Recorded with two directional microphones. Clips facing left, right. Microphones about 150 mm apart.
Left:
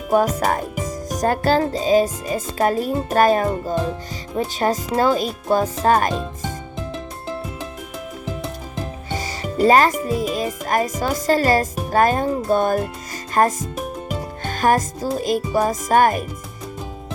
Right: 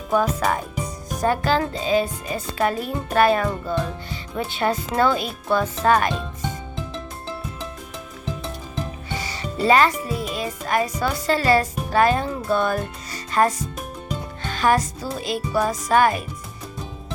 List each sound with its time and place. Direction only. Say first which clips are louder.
0.1 s speech: left 3 dB; 40° left (ahead or behind)
9.1 s speech: left 5 dB; 45° left (ahead or behind)
14.2 s music: left 2 dB; 45° left (ahead or behind)